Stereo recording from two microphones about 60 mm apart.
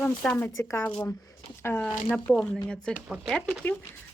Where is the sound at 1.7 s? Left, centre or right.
Left.